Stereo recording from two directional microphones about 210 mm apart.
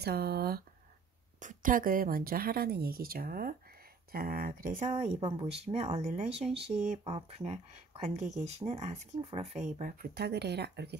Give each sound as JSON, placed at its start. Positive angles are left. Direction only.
{"t": 0.0, "sound": "speech", "side_deg": -50}
{"t": 4.7, "sound": "speech", "side_deg": -30}